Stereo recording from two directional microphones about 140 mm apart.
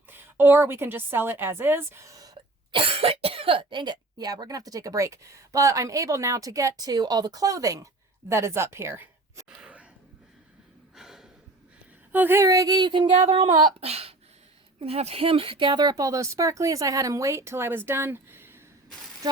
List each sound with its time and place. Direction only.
0.1 s a woman's voice: 15° right (ahead or behind)
2.7 s speech: 40° right (ahead or behind); by 9.5 s 20° right (ahead or behind)
9.5 s a sound: 10° right (ahead or behind)
10.9 s gasp: centre (ahead or behind)
12.1 s speech: 15° right (ahead or behind); by 13.1 s 35° right (ahead or behind)
13.7 s a sound: 45° right (ahead or behind)
14.8 s speech: 45° right (ahead or behind); by 18.5 s 15° right (ahead or behind)